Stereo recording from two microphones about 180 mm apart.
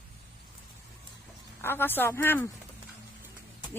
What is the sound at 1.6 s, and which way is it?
Speech, 10° left (ahead or behind).